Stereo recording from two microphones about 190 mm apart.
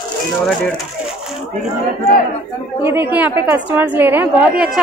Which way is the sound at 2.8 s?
10° right (ahead or behind).